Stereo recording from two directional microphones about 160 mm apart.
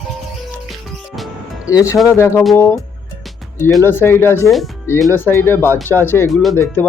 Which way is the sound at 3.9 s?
15° left (ahead or behind).